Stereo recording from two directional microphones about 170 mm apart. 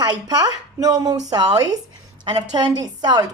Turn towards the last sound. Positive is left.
turn(degrees=-25)  # may be behind; listen again after turning